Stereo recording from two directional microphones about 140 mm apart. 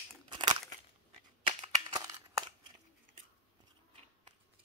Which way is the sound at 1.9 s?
25° right (ahead or behind).